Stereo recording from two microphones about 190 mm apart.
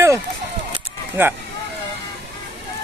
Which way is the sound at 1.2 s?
10° right (ahead or behind).